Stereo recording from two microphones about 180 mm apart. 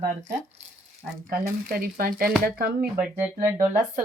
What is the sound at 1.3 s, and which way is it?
Speech, 50° right (ahead or behind).